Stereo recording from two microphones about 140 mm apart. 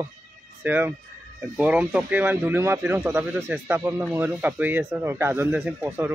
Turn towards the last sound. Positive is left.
turn(degrees=-15)  # may be behind; listen again after turning